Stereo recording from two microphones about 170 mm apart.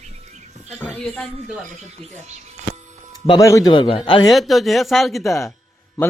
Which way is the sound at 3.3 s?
20° left (ahead or behind).